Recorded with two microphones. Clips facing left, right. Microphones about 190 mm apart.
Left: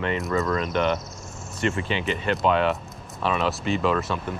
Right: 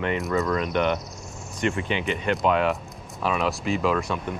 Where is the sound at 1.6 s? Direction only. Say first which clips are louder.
Even; 15° right (ahead or behind).